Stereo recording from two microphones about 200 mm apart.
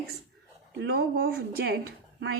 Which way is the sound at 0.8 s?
55° right (ahead or behind).